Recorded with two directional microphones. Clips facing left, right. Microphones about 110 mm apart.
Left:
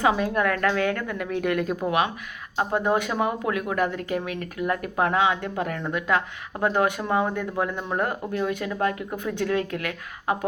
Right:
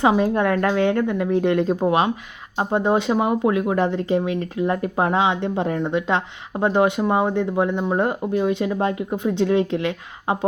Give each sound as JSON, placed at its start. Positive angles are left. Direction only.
{"t": 0.0, "sound": "speech", "side_deg": -25}